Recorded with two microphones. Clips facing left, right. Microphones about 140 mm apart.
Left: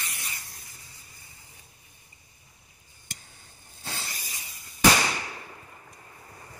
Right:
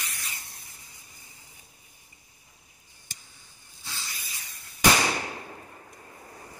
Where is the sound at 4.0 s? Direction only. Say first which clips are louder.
Left 2 dB; 40° left (ahead or behind).